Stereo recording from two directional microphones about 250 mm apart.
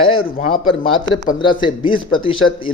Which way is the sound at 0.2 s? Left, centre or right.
Left.